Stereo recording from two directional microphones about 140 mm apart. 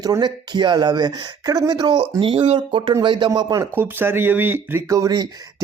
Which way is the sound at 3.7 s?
15° right (ahead or behind).